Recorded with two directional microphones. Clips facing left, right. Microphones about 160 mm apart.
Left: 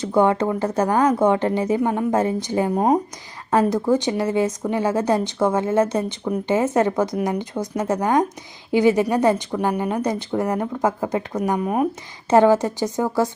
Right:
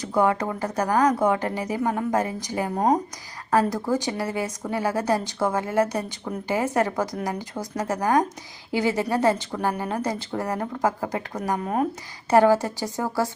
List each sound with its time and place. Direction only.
0.0 s speech: 25° left (ahead or behind)